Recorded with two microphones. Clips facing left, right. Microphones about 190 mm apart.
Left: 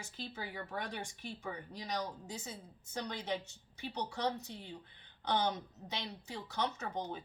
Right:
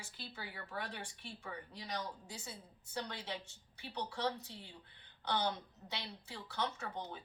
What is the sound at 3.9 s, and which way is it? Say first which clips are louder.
Speech: left 2 dB; 40° left (ahead or behind).